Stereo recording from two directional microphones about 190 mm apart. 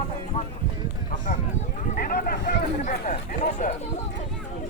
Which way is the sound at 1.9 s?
50° left (ahead or behind).